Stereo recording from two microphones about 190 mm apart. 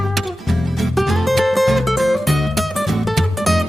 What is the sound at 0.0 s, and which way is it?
Music, centre (ahead or behind).